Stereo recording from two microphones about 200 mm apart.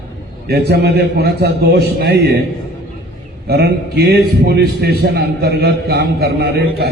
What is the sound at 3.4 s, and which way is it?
A man's voice, 55° right (ahead or behind).